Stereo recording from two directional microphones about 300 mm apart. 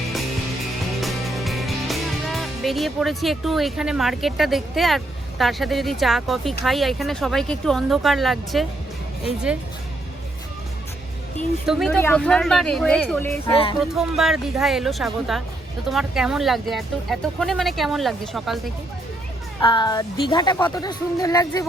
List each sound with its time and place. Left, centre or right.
1.0 s speech: centre
11.6 s speech: centre
13.5 s a woman's voice: centre
13.8 s speech: centre
19.6 s a woman's voice: centre